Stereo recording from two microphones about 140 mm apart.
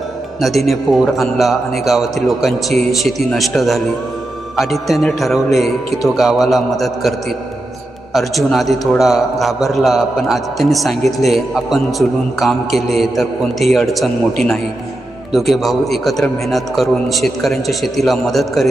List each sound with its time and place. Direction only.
0.3 s a man's voice: centre (ahead or behind)